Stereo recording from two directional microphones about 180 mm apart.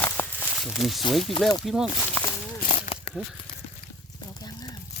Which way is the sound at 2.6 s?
45° left (ahead or behind).